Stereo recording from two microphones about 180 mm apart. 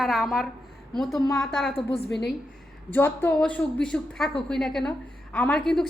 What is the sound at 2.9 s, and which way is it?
A woman's voice, 10° left (ahead or behind).